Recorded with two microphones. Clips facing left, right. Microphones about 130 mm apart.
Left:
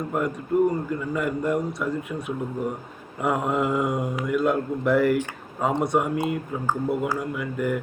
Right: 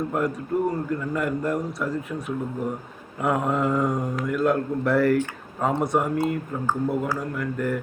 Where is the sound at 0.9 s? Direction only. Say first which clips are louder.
Right 1 dB; centre (ahead or behind).